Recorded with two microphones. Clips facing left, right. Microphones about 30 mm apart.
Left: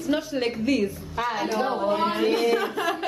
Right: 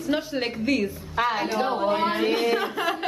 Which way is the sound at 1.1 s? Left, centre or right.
Right.